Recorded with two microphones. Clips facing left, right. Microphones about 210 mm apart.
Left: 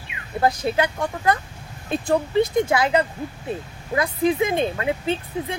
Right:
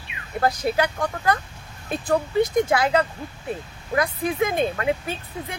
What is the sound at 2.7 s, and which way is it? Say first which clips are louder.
Speech: left 1 dB; 25° left (ahead or behind).